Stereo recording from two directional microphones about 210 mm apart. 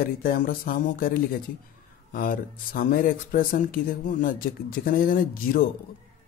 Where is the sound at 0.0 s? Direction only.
45° left (ahead or behind).